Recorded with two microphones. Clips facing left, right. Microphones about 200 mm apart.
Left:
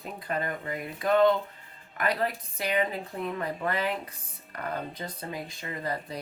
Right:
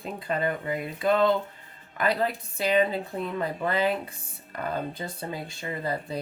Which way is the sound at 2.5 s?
30° right (ahead or behind).